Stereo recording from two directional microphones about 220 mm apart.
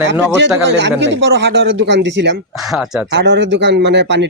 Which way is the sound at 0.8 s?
55° right (ahead or behind).